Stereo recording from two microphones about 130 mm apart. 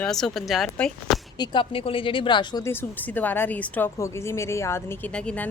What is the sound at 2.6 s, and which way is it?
A woman's voice, 15° left (ahead or behind).